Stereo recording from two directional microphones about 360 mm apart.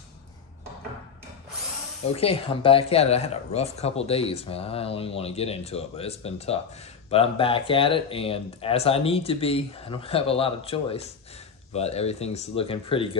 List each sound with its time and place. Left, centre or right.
2.1 s speech: centre